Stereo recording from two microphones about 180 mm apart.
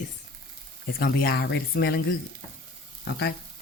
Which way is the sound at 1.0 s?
60° left (ahead or behind).